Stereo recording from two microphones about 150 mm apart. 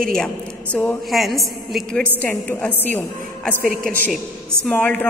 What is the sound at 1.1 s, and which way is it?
A woman's voice, centre (ahead or behind).